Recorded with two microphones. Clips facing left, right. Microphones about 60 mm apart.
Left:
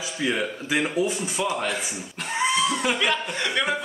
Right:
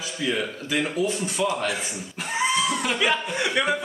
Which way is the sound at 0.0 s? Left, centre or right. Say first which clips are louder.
Left 1 dB; centre.